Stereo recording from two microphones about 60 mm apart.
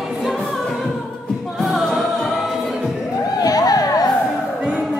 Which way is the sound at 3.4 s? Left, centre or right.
Left.